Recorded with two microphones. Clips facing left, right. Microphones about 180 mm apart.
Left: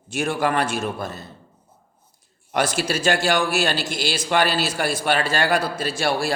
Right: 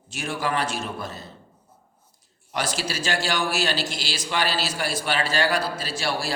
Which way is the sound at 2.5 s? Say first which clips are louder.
Left 6 dB; 55° left (ahead or behind).